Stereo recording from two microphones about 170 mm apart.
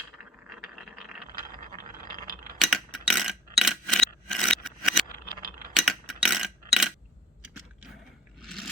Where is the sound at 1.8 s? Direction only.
55° right (ahead or behind).